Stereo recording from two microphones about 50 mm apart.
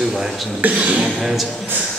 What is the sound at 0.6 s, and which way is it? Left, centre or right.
Speech, right.